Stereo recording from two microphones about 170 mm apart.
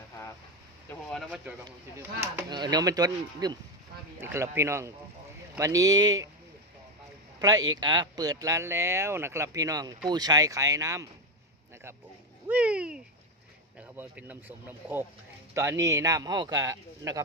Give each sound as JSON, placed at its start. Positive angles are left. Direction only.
{"t": 0.9, "sound": "a sound", "side_deg": 0}
{"t": 2.0, "sound": "speech", "side_deg": -15}
{"t": 7.3, "sound": "speech", "side_deg": -20}
{"t": 12.5, "sound": "speech", "side_deg": -10}